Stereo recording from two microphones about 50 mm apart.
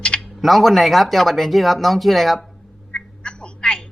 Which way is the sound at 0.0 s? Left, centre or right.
Centre.